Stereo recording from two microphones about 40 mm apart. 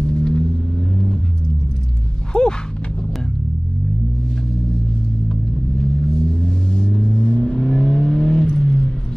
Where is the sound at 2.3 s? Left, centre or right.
Centre.